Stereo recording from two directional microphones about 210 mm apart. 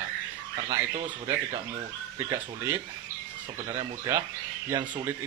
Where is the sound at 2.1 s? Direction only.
15° right (ahead or behind).